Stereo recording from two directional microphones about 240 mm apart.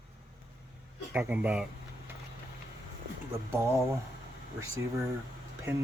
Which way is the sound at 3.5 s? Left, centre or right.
Centre.